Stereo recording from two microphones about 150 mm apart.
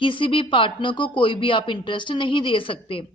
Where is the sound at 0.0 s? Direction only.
35° left (ahead or behind).